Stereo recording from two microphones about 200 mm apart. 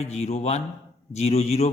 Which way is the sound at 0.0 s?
35° left (ahead or behind).